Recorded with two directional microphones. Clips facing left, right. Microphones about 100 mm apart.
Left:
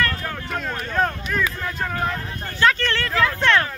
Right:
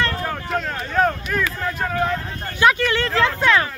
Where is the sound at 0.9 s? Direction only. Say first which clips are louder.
Right 3 dB; 5° right (ahead or behind).